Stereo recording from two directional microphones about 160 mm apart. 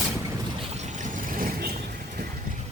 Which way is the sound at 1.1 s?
60° right (ahead or behind).